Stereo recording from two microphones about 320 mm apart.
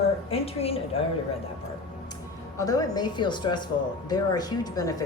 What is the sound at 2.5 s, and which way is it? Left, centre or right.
Speech, centre.